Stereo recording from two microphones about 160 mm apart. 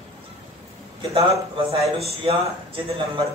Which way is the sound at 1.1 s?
40° right (ahead or behind).